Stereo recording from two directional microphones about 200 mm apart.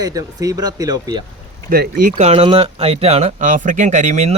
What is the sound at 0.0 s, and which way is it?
Speech, 15° right (ahead or behind).